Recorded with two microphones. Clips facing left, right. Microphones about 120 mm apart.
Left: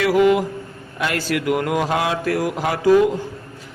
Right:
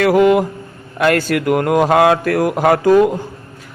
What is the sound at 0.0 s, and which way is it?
Speech, 55° right (ahead or behind).